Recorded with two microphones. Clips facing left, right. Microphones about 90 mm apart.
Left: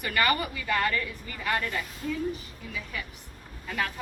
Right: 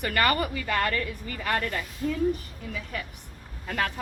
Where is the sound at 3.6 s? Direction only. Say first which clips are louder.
Right 2 dB; 50° right (ahead or behind).